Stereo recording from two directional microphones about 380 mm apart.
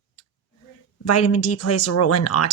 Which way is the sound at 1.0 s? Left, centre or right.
Left.